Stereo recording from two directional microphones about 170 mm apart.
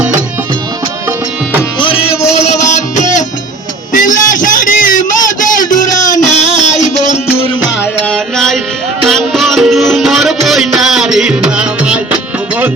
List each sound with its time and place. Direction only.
1.8 s music: 35° left (ahead or behind)
3.9 s a sound: 50° left (ahead or behind)
6.3 s music: 45° left (ahead or behind)
8.1 s music: 5° left (ahead or behind)